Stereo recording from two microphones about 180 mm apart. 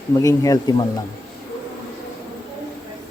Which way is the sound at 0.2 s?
20° left (ahead or behind).